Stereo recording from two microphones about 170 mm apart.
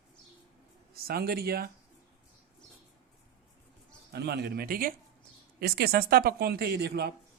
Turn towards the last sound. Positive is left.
turn(degrees=-70)  # may be behind; listen again after turning